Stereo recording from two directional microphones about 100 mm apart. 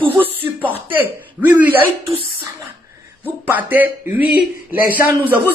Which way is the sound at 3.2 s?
20° right (ahead or behind).